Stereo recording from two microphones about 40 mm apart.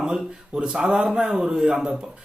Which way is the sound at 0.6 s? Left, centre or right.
Right.